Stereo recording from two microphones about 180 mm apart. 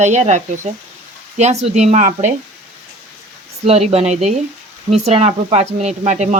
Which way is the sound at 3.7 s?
35° right (ahead or behind).